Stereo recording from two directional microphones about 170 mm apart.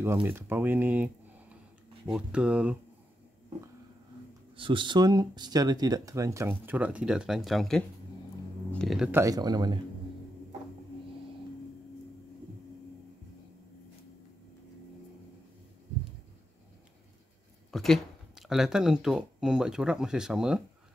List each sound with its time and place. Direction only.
0.0 s speech: 15° right (ahead or behind)
4.6 s speech: 30° right (ahead or behind); by 9.1 s centre (ahead or behind)
9.1 s speech: 20° right (ahead or behind)
17.6 s speech: centre (ahead or behind)